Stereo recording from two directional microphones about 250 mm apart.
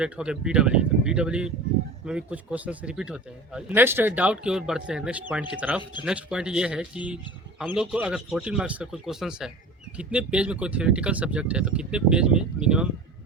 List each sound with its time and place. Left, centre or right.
0.0 s speech: centre